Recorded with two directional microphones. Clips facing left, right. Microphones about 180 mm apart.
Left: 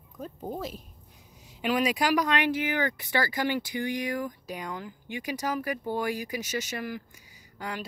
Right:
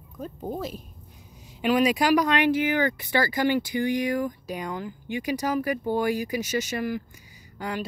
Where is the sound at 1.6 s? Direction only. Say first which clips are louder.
Right 5 dB; 25° right (ahead or behind).